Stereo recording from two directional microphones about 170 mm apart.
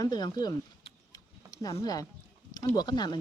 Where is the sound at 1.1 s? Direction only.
20° left (ahead or behind).